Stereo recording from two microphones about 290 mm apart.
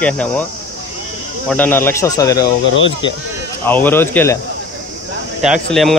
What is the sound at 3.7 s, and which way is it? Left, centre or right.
Speech, centre.